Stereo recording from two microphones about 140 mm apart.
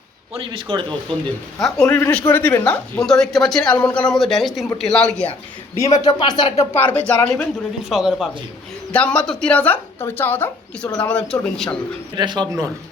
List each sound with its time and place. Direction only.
0.3 s speech: 35° right (ahead or behind)
1.6 s a man's voice: 5° left (ahead or behind)
5.7 s speech: 20° left (ahead or behind)
6.1 s speech: 35° left (ahead or behind)
6.7 s speech: 10° left (ahead or behind)
7.9 s a man's voice: centre (ahead or behind)
12.1 s speech: 30° right (ahead or behind)